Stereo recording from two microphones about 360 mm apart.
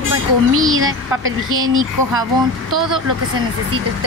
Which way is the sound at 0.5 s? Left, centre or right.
Right.